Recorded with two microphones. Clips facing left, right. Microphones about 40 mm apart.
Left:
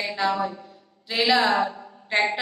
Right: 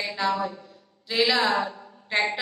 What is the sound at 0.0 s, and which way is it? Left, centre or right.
A woman's voice, centre.